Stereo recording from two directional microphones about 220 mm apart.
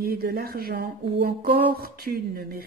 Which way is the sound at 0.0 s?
45° right (ahead or behind).